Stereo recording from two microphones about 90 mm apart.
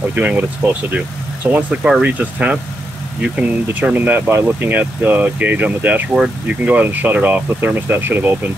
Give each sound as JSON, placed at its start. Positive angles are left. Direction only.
{"t": 0.1, "sound": "speech", "side_deg": -15}
{"t": 1.5, "sound": "speech", "side_deg": -10}